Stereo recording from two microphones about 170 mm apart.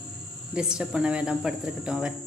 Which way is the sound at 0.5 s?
5° right (ahead or behind).